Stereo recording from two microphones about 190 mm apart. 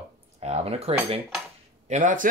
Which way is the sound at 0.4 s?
35° right (ahead or behind).